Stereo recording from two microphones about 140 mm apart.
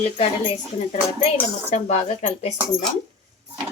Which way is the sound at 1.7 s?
50° left (ahead or behind).